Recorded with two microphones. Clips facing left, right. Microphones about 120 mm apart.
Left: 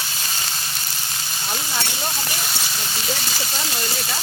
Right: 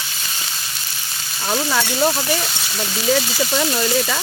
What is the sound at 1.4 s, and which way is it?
Speech, 90° right.